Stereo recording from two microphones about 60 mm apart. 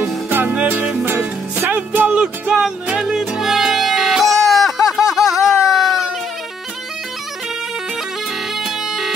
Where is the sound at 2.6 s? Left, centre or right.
Centre.